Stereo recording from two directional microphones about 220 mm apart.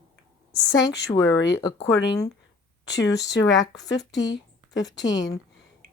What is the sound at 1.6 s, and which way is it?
A woman's voice, 15° left (ahead or behind).